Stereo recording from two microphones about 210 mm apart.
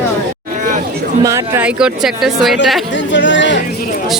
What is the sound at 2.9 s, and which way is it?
Speech, 60° left (ahead or behind).